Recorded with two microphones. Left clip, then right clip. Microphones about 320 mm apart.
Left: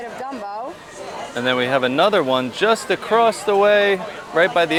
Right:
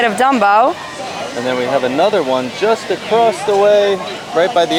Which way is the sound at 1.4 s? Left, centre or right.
Left.